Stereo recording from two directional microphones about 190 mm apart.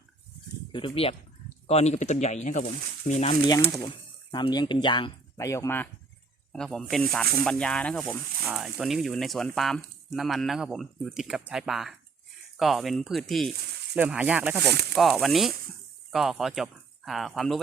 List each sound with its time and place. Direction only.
0.7 s speech: 25° left (ahead or behind)
3.7 s speech: 25° left (ahead or behind); by 17.6 s centre (ahead or behind)